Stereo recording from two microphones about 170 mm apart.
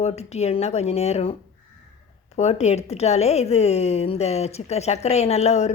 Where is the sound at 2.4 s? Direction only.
40° left (ahead or behind).